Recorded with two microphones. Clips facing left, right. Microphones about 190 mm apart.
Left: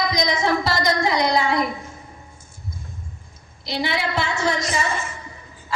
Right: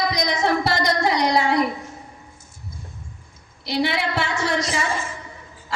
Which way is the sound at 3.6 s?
65° right (ahead or behind).